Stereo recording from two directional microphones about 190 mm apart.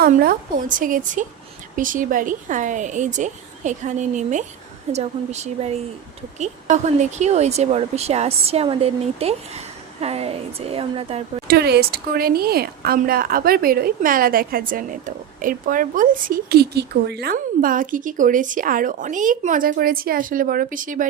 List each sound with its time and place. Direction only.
0.0 s a woman's voice: 50° right (ahead or behind); by 11.2 s 30° right (ahead or behind)
11.4 s a woman's voice: 60° right (ahead or behind)